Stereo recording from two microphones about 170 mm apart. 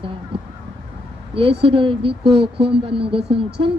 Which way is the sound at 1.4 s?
30° right (ahead or behind).